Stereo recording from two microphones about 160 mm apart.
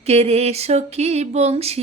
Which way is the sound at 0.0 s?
40° right (ahead or behind).